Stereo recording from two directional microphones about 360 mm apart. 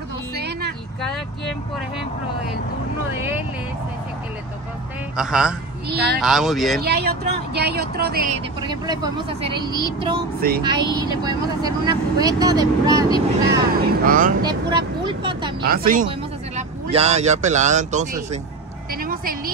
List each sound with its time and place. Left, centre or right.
0.4 s vehicle: right
5.1 s speech: centre
5.9 s speech: right
6.2 s speech: centre
6.8 s speech: right
8.5 s speech: centre
14.0 s speech: right
14.4 s speech: centre
15.6 s speech: right
18.9 s vehicle: right